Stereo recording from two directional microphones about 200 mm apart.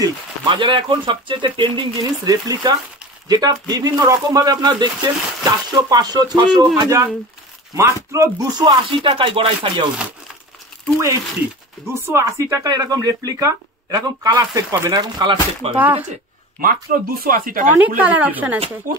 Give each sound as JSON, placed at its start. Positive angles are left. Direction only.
{"t": 0.0, "sound": "speech", "side_deg": -25}
{"t": 11.9, "sound": "speech", "side_deg": -15}
{"t": 15.6, "sound": "speech", "side_deg": -30}
{"t": 16.6, "sound": "speech", "side_deg": -45}
{"t": 17.7, "sound": "speech", "side_deg": -10}
{"t": 18.9, "sound": "speech", "side_deg": -40}